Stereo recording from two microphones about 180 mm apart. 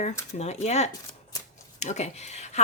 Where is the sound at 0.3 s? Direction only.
40° left (ahead or behind).